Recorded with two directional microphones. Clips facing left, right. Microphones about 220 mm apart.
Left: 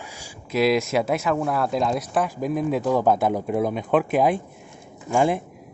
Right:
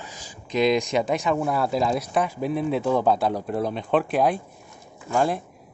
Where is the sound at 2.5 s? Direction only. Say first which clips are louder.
Left 1 dB; 15° left (ahead or behind).